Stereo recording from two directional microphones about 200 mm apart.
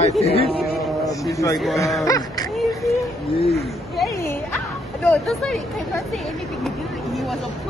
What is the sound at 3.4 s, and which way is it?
Speech, 30° left (ahead or behind).